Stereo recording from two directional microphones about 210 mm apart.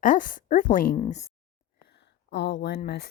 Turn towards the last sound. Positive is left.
turn(degrees=50)  # may be behind; listen again after turning